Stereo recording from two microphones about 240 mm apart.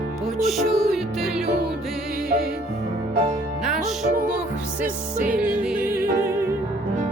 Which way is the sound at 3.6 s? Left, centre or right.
Centre.